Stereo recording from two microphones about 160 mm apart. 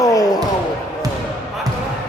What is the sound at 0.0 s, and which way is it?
Basketball bounce, 20° left (ahead or behind).